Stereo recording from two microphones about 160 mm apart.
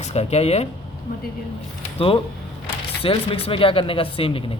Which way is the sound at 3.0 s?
35° left (ahead or behind).